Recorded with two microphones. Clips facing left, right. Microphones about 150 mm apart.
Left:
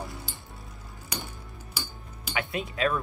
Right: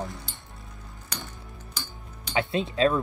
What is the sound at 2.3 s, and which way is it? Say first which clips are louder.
Speech: right 5 dB; 25° right (ahead or behind).